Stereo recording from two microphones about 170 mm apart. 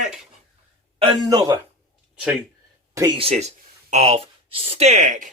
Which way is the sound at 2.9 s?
15° right (ahead or behind).